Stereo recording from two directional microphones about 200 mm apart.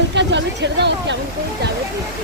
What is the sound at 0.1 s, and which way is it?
Speech, 60° right (ahead or behind).